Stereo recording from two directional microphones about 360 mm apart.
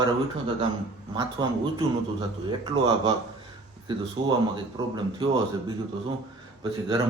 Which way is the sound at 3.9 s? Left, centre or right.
Centre.